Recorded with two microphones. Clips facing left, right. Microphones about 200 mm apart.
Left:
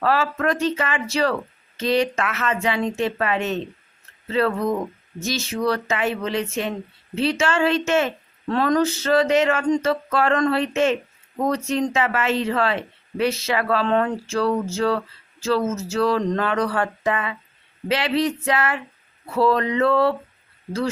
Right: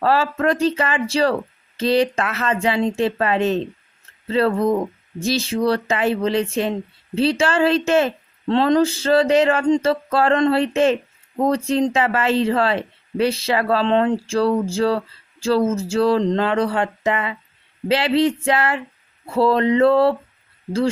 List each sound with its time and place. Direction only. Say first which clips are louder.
0.0 s speech: right 3 dB; 30° right (ahead or behind)